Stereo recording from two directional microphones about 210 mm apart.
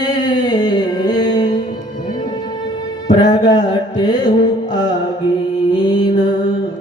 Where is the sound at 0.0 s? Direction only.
20° left (ahead or behind).